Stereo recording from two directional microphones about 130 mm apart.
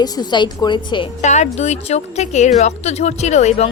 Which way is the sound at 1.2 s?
65° left (ahead or behind).